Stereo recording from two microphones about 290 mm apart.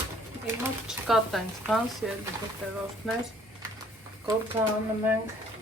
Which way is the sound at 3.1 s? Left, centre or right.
Centre.